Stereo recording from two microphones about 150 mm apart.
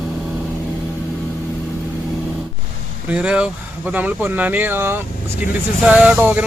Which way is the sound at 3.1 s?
5° right (ahead or behind).